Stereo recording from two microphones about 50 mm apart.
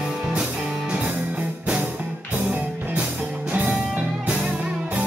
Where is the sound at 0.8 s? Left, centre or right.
Right.